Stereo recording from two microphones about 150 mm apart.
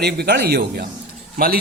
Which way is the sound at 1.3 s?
80° right.